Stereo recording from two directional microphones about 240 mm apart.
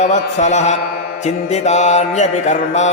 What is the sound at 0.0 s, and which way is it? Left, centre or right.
Mantra, left.